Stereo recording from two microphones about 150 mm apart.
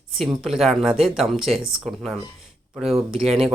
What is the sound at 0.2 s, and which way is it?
Speech, centre (ahead or behind).